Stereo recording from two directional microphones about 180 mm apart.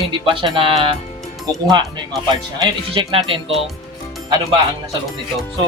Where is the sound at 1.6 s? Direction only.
25° right (ahead or behind).